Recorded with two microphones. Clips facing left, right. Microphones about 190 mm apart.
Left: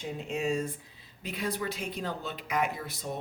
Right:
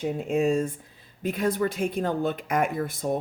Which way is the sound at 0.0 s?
50° right (ahead or behind).